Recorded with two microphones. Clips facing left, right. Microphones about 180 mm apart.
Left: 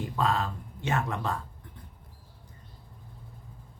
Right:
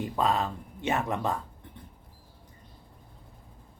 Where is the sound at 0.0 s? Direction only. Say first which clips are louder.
Right 1 dB; 20° right (ahead or behind).